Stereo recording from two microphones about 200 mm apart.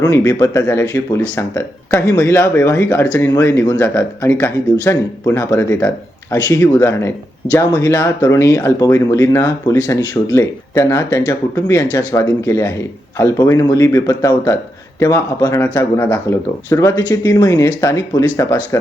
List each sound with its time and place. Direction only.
0.0 s speech: 15° left (ahead or behind)